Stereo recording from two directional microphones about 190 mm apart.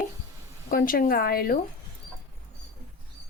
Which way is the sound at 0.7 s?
50° left (ahead or behind).